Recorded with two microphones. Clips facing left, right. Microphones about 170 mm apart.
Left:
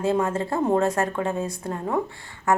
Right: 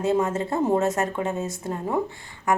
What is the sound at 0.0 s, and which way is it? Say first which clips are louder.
A woman's voice: even; 20° right (ahead or behind).